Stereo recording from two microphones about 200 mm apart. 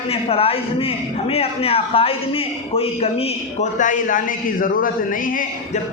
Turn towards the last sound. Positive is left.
turn(degrees=45)  # may be behind; listen again after turning